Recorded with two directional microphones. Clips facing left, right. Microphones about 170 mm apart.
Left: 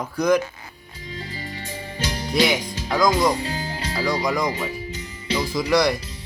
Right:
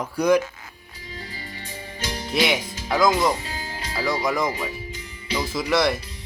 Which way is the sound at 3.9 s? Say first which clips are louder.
Left 1 dB; 5° right (ahead or behind).